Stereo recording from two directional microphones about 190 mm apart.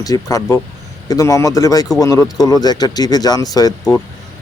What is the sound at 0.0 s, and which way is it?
Speech, 20° left (ahead or behind).